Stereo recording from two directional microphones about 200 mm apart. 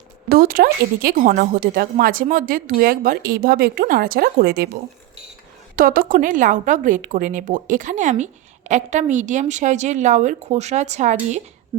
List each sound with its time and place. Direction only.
0.3 s speech: 45° right (ahead or behind)
5.7 s a woman's voice: 45° right (ahead or behind)
11.7 s speech: 20° right (ahead or behind)